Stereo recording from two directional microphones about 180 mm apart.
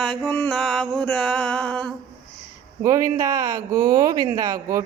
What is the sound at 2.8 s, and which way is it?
Speech, 15° right (ahead or behind).